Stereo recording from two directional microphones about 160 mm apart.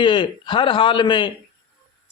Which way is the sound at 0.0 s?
30° left (ahead or behind).